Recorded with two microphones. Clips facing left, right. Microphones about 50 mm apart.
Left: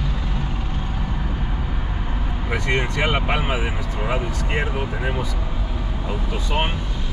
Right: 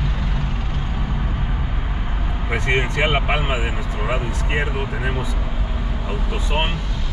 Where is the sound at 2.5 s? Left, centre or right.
Right.